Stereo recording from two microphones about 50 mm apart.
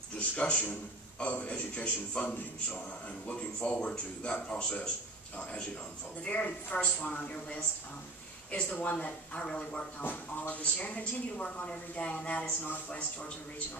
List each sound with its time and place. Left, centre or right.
0.4 s a man's voice: left
3.3 s a man's voice: left
8.6 s speech: left
8.9 s a man's voice: left